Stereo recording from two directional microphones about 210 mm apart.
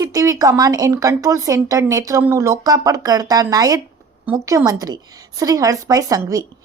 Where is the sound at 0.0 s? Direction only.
15° right (ahead or behind).